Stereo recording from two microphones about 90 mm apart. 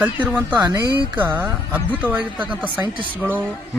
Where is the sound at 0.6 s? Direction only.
40° right (ahead or behind).